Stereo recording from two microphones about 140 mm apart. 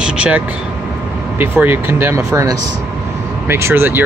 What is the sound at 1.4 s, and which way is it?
Speech, 15° right (ahead or behind).